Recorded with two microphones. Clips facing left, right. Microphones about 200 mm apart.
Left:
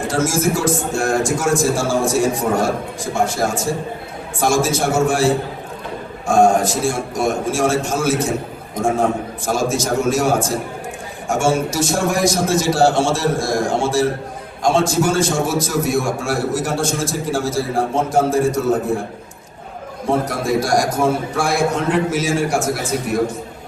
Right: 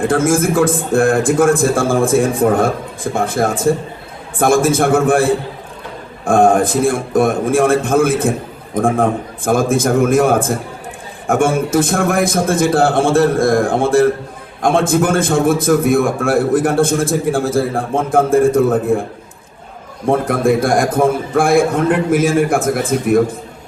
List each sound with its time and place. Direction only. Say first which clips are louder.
0.0 s a man's voice: right 5 dB; 55° right (ahead or behind)
20.1 s a man's voice: right 5 dB; 55° right (ahead or behind)